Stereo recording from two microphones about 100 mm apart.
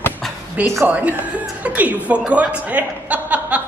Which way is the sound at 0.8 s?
15° right (ahead or behind).